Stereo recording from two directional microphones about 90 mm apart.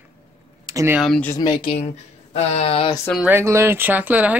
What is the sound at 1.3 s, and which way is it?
Speech, 45° left (ahead or behind).